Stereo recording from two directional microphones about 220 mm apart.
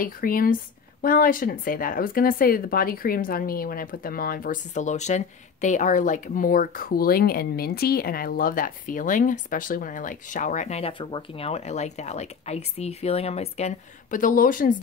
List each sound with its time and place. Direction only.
0.0 s speech: 40° left (ahead or behind)